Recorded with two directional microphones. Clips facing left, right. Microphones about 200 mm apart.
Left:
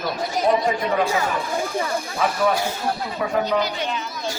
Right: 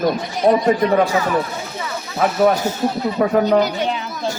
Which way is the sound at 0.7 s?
40° right (ahead or behind).